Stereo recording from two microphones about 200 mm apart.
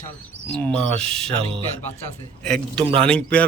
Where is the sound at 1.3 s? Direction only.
30° right (ahead or behind).